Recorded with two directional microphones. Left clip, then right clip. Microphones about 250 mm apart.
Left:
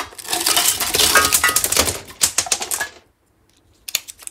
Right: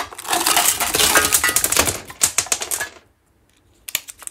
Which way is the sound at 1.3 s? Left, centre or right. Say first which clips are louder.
Left 2 dB; centre.